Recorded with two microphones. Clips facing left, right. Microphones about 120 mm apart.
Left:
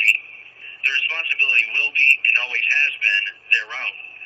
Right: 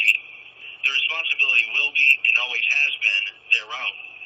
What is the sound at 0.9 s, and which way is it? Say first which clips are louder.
Speech: left 2 dB; 15° right (ahead or behind).